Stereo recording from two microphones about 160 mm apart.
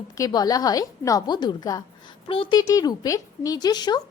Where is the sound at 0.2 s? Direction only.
25° left (ahead or behind).